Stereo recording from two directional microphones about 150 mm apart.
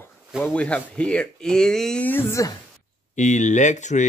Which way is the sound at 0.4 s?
10° left (ahead or behind).